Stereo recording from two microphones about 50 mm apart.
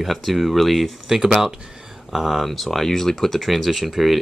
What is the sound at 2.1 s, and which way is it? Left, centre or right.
Speech, centre.